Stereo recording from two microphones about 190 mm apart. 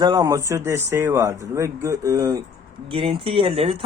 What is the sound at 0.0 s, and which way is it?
Speech, 20° right (ahead or behind).